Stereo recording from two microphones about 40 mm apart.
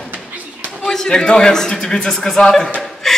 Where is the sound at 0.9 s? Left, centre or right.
Centre.